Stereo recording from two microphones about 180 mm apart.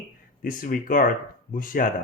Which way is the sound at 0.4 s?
50° left (ahead or behind).